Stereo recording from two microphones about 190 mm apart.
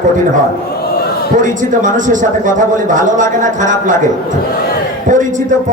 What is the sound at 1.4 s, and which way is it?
Speech, 40° right (ahead or behind).